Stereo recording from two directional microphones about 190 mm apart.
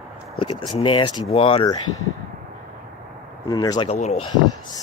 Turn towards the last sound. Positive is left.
turn(degrees=35)  # may be behind; listen again after turning